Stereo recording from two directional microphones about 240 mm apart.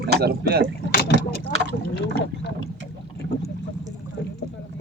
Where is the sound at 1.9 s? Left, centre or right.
Left.